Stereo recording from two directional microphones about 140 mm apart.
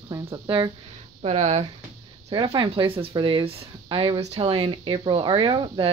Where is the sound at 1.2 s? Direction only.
50° right (ahead or behind).